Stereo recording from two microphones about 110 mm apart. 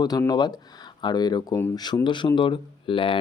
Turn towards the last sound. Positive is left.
turn(degrees=50)  # may be behind; listen again after turning